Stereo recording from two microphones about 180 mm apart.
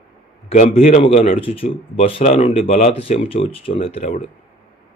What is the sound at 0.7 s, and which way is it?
Speech, 30° left (ahead or behind).